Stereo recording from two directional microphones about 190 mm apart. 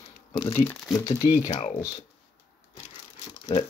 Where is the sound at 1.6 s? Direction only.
25° left (ahead or behind).